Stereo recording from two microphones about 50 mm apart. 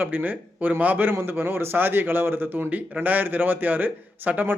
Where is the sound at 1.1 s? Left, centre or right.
Right.